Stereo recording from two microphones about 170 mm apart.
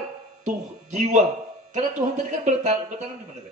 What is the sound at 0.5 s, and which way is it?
A man's voice, 45° right (ahead or behind).